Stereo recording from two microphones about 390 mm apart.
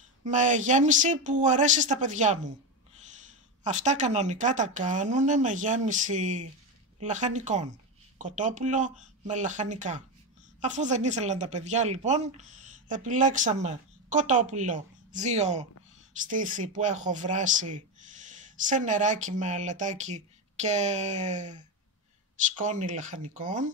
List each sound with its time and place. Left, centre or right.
0.2 s speech: centre